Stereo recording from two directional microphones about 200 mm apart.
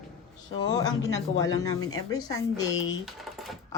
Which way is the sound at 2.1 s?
20° left (ahead or behind).